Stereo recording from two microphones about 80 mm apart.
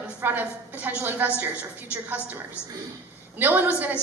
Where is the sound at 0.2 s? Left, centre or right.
Right.